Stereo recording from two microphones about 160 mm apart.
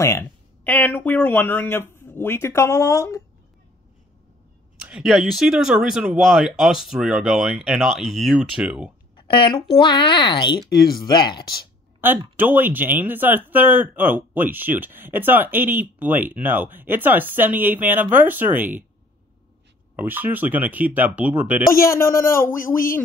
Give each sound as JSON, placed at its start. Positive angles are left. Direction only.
{"t": 0.0, "sound": "speech", "side_deg": 15}
{"t": 4.8, "sound": "speech", "side_deg": -5}
{"t": 9.1, "sound": "a sound", "side_deg": 30}
{"t": 9.8, "sound": "speech", "side_deg": 30}
{"t": 12.0, "sound": "speech", "side_deg": -10}
{"t": 20.0, "sound": "speech", "side_deg": -10}
{"t": 21.7, "sound": "speech", "side_deg": 20}